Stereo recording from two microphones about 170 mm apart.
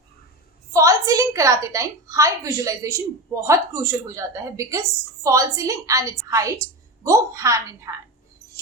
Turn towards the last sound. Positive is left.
turn(degrees=-20)  # may be behind; listen again after turning